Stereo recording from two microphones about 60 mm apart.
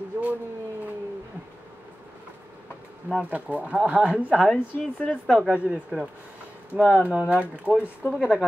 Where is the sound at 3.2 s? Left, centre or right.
Right.